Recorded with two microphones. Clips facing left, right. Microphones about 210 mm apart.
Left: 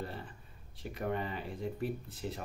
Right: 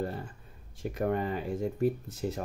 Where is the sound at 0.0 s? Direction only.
45° right (ahead or behind).